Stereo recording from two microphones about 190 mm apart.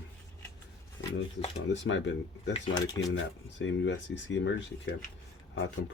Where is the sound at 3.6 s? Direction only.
70° left (ahead or behind).